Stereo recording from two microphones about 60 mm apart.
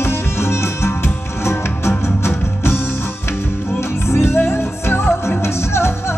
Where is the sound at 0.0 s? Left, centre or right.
Left.